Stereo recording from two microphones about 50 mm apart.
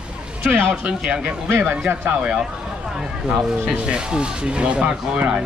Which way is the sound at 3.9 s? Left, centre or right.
Centre.